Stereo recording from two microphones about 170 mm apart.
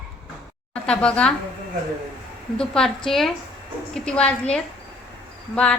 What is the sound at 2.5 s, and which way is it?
A woman's voice, 5° left (ahead or behind).